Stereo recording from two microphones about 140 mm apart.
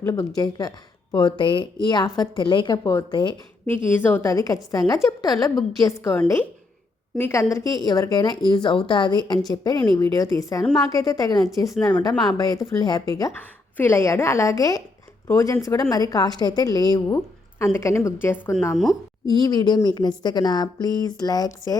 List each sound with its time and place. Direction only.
0.0 s a woman's voice: 20° left (ahead or behind)
3.7 s a woman's voice: 15° left (ahead or behind)
13.3 s speech: 15° left (ahead or behind)
19.2 s speech: 30° left (ahead or behind)